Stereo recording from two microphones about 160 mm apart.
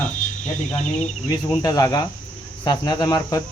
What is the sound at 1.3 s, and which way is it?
Speech, 25° left (ahead or behind).